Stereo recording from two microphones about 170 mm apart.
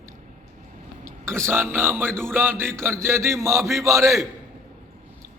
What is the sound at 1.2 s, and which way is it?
A man's voice, 15° right (ahead or behind).